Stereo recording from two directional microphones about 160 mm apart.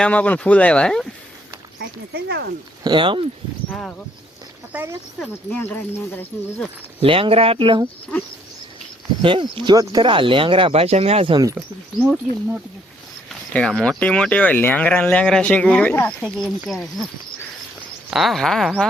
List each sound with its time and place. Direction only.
0.0 s speech: 10° left (ahead or behind)
1.8 s speech: 90° right
2.8 s speech: 30° right (ahead or behind)
3.7 s speech: 5° left (ahead or behind)
4.7 s speech: 15° right (ahead or behind)
5.5 s speech: 10° left (ahead or behind)
7.0 s speech: 35° right (ahead or behind)
9.2 s speech: 30° right (ahead or behind)
13.5 s speech: 5° left (ahead or behind)
18.1 s speech: centre (ahead or behind)